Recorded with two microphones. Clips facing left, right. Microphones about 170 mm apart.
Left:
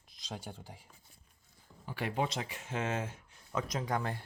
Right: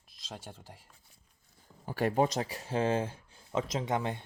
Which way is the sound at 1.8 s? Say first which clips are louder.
Right 7 dB; 45° right (ahead or behind).